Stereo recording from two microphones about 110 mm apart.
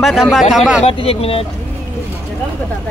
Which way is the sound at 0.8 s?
60° left (ahead or behind).